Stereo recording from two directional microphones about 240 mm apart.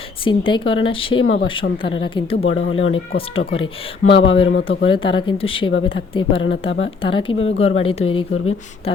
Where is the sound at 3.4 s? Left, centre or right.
Left.